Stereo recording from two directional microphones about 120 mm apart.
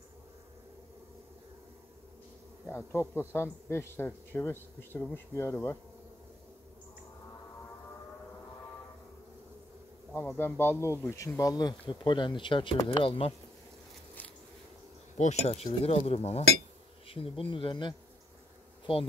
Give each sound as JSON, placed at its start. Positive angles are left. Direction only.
{"t": 2.7, "sound": "speech", "side_deg": 20}
{"t": 10.1, "sound": "speech", "side_deg": 20}
{"t": 15.1, "sound": "speech", "side_deg": 70}